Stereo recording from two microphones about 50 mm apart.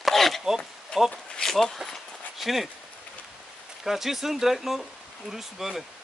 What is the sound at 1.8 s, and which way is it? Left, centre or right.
Walk, centre.